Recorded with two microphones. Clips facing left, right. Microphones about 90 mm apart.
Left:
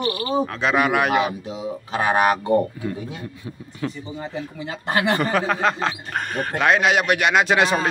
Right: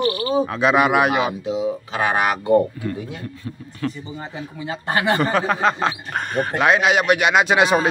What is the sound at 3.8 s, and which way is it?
Speech, 15° left (ahead or behind).